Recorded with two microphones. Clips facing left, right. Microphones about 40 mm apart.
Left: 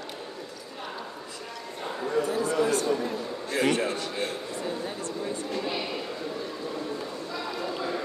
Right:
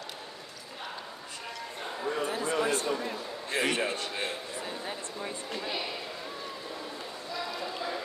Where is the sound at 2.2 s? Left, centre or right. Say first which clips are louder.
Left 2 dB; right.